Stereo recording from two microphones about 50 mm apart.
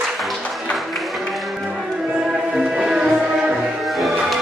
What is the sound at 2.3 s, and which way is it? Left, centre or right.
Music, centre.